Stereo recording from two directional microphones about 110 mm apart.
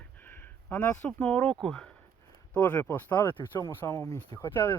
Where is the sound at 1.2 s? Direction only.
10° left (ahead or behind).